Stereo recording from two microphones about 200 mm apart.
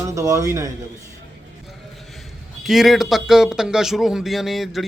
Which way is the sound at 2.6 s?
Centre (ahead or behind).